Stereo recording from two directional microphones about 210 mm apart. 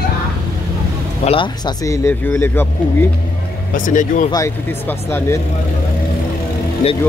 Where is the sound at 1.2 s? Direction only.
25° left (ahead or behind).